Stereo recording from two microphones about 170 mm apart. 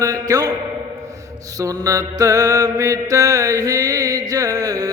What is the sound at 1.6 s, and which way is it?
Mantra, 20° right (ahead or behind).